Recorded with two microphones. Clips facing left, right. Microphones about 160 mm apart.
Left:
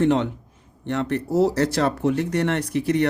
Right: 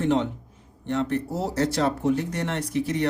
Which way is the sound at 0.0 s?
70° left (ahead or behind).